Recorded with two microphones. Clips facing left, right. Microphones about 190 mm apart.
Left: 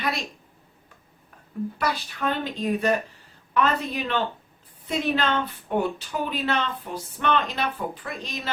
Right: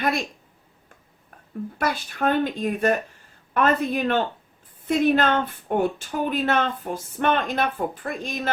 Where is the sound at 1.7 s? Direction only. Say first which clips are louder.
Right 5 dB; 50° right (ahead or behind).